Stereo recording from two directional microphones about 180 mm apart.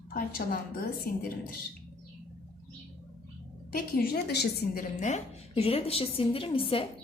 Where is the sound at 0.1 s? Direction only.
50° left (ahead or behind).